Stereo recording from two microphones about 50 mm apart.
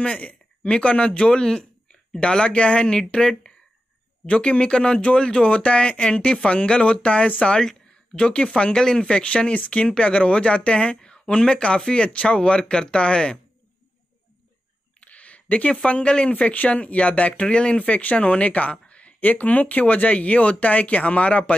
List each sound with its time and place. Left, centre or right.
0.0 s speech: left
7.5 s a sound: centre
8.3 s speech: left
15.0 s speech: left